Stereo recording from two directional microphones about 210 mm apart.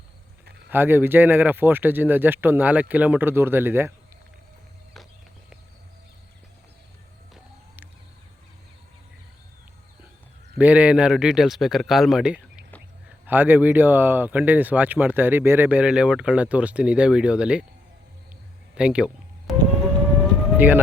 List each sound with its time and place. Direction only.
0.7 s speech: 10° right (ahead or behind)
10.6 s speech: 5° right (ahead or behind)
18.7 s a sound: 5° right (ahead or behind)
20.6 s speech: 10° right (ahead or behind)